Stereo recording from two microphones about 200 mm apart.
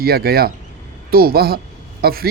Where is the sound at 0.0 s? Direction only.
50° right (ahead or behind).